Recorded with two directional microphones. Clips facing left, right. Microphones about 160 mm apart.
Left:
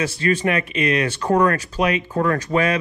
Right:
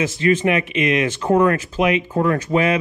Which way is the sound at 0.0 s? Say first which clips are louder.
Right 3 dB; 20° right (ahead or behind).